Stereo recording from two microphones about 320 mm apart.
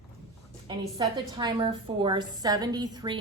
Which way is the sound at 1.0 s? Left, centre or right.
Centre.